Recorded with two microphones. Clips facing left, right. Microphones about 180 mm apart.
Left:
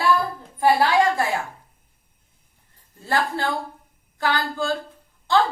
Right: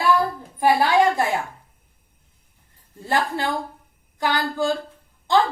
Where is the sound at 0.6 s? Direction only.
20° right (ahead or behind).